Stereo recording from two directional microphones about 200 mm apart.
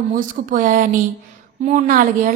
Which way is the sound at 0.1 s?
40° right (ahead or behind).